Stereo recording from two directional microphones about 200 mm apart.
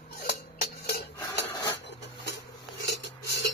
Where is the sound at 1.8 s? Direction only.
60° left (ahead or behind).